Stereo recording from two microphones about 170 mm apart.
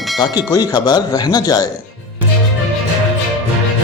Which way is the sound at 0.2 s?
20° left (ahead or behind).